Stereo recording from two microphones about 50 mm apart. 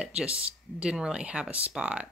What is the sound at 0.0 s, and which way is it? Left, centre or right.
Speech, centre.